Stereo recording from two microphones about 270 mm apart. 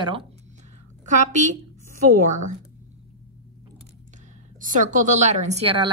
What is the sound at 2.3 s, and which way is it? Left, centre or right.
Speech, right.